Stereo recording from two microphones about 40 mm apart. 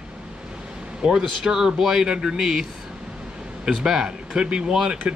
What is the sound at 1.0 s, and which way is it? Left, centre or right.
Speech, centre.